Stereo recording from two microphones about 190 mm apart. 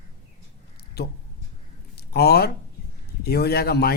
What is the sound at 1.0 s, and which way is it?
Speech, 55° left (ahead or behind).